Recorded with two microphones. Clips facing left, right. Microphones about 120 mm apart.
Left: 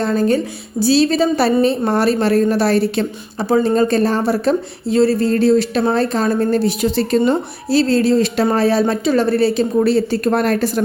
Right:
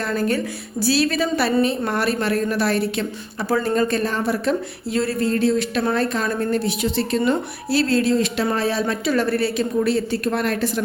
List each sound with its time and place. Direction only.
0.0 s a woman's voice: 25° left (ahead or behind)